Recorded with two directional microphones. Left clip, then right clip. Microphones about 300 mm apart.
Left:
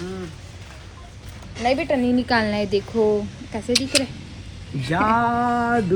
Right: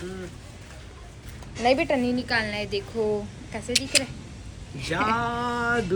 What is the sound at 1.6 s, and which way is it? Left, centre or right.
Speech, centre.